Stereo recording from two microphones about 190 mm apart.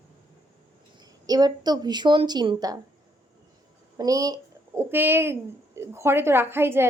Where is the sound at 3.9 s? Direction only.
20° right (ahead or behind).